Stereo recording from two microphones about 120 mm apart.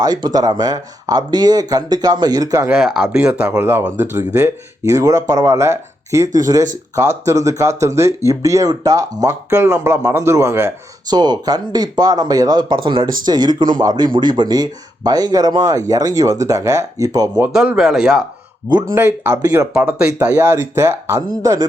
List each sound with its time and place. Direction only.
0.0 s speech: 35° right (ahead or behind)
2.6 s speech: 5° right (ahead or behind); by 10.7 s 20° right (ahead or behind)
11.1 s speech: 35° right (ahead or behind)
17.5 s speech: 5° right (ahead or behind)
18.9 s speech: 20° right (ahead or behind)
19.7 s speech: 10° right (ahead or behind)